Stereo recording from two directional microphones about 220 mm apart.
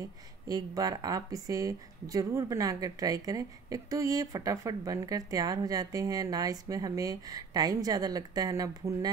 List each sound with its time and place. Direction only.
0.5 s speech: 15° right (ahead or behind)